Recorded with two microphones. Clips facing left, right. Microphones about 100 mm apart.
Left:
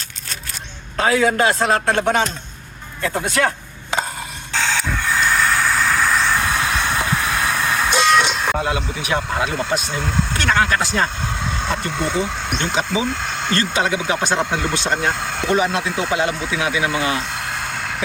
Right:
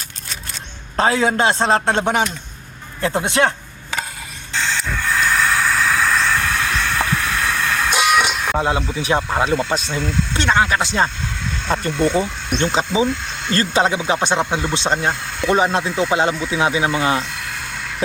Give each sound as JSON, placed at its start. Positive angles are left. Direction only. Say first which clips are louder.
{"t": 0.9, "sound": "a man's voice", "louder": "even", "side_deg": -30}
{"t": 4.5, "sound": "vehicle", "louder": "left 1 dB", "side_deg": 0}
{"t": 6.3, "sound": "vehicle", "louder": "even", "side_deg": 15}
{"t": 7.9, "sound": "vehicle", "louder": "left 1 dB", "side_deg": -10}
{"t": 8.6, "sound": "a man's voice", "louder": "right 3 dB", "side_deg": -30}
{"t": 11.7, "sound": "speech", "louder": "right 6 dB", "side_deg": -35}